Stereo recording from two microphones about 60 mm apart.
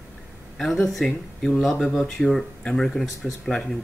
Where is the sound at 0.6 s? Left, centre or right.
Centre.